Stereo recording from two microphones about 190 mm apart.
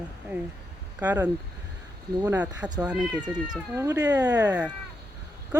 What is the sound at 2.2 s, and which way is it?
Speech, 10° right (ahead or behind).